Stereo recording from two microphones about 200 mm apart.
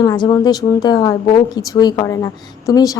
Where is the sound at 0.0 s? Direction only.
20° left (ahead or behind).